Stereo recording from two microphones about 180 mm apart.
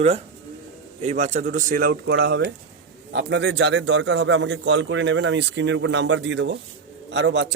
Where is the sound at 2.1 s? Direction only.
75° right (ahead or behind).